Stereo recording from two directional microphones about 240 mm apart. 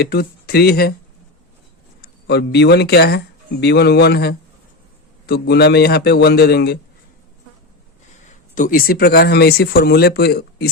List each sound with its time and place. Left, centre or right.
0.0 s speech: left
2.0 s a man's voice: left
8.5 s speech: left